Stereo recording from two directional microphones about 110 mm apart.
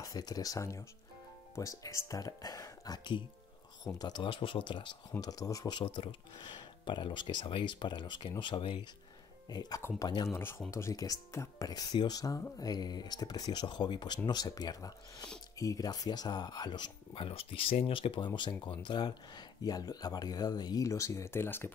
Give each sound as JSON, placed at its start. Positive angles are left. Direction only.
{"t": 0.0, "sound": "speech", "side_deg": 35}
{"t": 5.2, "sound": "speech", "side_deg": 35}
{"t": 9.5, "sound": "speech", "side_deg": 40}
{"t": 9.8, "sound": "speech", "side_deg": 25}